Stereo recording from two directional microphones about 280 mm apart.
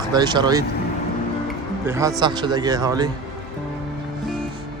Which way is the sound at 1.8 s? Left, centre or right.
Centre.